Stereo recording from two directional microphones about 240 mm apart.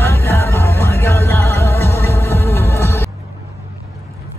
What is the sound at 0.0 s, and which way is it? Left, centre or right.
Music, centre.